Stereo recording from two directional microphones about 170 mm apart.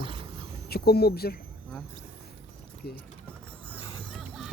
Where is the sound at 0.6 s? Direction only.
70° left (ahead or behind).